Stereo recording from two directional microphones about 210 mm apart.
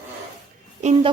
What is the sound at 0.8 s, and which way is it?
Speech, 30° right (ahead or behind).